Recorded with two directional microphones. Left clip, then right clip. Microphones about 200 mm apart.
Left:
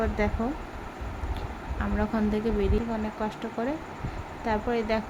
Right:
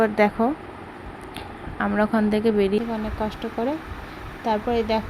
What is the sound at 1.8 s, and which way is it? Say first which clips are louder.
Speech: right 8 dB; 25° right (ahead or behind).